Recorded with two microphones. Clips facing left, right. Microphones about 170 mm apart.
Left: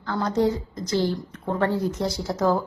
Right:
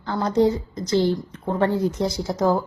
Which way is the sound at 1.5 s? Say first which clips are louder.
Right 3 dB; 20° right (ahead or behind).